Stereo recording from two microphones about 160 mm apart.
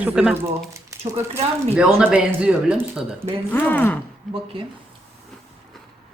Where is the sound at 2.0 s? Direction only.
5° right (ahead or behind).